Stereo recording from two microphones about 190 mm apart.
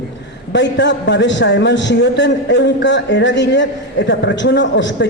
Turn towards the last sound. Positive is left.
turn(degrees=70)  # may be behind; listen again after turning